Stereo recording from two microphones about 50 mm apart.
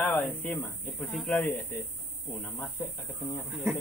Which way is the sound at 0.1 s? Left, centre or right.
Left.